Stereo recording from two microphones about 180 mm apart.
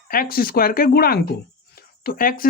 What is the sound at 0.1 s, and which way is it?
Speech, 55° left (ahead or behind).